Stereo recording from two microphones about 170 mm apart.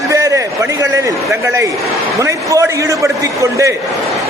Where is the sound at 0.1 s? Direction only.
20° right (ahead or behind).